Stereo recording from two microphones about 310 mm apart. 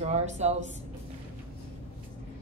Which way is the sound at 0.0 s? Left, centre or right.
Right.